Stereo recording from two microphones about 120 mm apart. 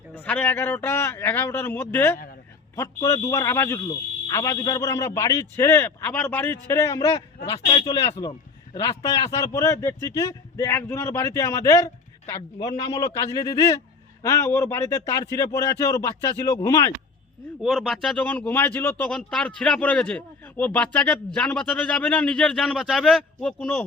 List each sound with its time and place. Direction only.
0.2 s a man's voice: 10° left (ahead or behind); by 13.0 s 35° left (ahead or behind)
14.2 s speech: 25° left (ahead or behind)
17.6 s a man's voice: 5° left (ahead or behind)
19.1 s a man's voice: 5° left (ahead or behind)